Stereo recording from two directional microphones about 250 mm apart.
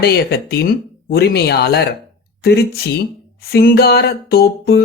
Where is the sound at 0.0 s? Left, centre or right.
Left.